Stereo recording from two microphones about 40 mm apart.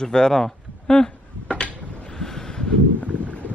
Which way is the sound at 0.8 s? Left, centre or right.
Left.